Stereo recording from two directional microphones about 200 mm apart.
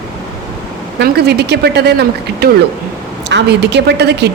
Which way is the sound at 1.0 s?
55° right (ahead or behind).